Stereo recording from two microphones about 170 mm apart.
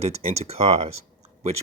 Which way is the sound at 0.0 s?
40° right (ahead or behind).